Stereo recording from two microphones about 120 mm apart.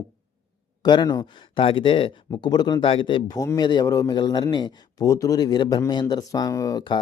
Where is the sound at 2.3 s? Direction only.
35° left (ahead or behind).